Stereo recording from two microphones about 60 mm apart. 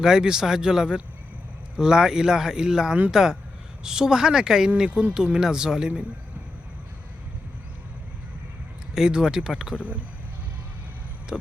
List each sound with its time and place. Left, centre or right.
0.0 s speech: centre
9.0 s speech: centre
11.3 s speech: centre